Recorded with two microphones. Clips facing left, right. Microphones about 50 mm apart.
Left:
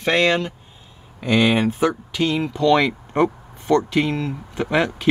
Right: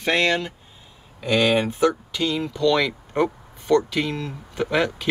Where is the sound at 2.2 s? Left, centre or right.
Left.